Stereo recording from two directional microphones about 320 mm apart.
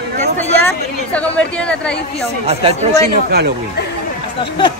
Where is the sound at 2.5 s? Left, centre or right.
Centre.